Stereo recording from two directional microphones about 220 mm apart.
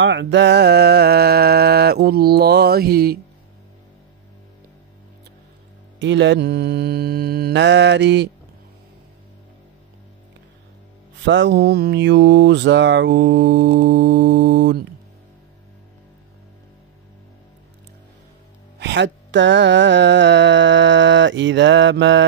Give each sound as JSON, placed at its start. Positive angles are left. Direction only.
{"t": 0.0, "sound": "music", "side_deg": -55}
{"t": 5.9, "sound": "mantra", "side_deg": -55}
{"t": 11.2, "sound": "mantra", "side_deg": -55}
{"t": 18.8, "sound": "music", "side_deg": -55}